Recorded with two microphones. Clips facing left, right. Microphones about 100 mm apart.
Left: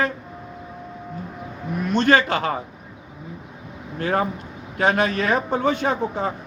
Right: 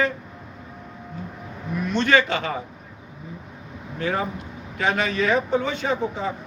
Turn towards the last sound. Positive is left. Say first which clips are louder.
# left 2 dB
turn(degrees=45)  # may be behind; listen again after turning